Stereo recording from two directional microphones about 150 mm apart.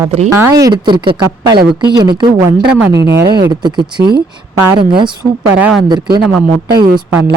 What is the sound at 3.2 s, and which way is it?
Speech, 30° right (ahead or behind).